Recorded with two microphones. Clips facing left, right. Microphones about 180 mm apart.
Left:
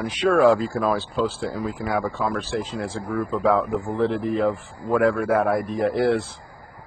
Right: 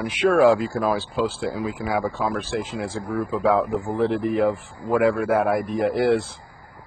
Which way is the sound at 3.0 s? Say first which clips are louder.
Even; 15° right (ahead or behind).